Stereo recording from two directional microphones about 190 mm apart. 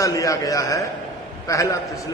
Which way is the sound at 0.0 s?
20° left (ahead or behind).